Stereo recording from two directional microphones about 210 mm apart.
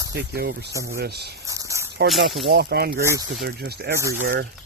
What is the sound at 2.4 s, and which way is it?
Speech, 50° right (ahead or behind).